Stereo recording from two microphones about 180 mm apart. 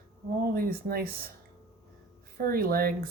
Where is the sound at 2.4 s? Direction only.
55° right (ahead or behind).